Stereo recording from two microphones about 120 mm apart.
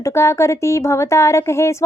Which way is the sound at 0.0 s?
25° left (ahead or behind).